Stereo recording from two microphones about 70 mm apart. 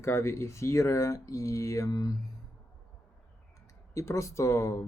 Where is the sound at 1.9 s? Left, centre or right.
Left.